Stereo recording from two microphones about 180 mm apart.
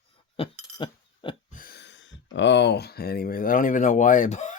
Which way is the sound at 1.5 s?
50° left (ahead or behind).